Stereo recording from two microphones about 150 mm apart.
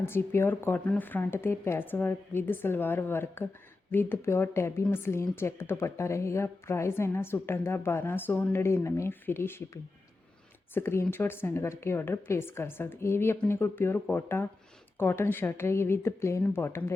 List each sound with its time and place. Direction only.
0.0 s speech: 15° left (ahead or behind)
10.8 s speech: 15° left (ahead or behind)